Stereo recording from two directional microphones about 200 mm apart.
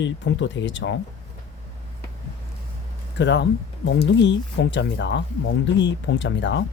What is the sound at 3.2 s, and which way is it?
Speech, 60° left (ahead or behind).